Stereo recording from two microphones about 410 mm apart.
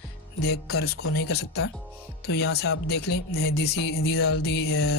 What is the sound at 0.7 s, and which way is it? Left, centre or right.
Music, left.